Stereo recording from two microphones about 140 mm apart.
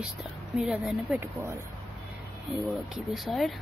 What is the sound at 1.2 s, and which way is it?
Speech, 15° right (ahead or behind).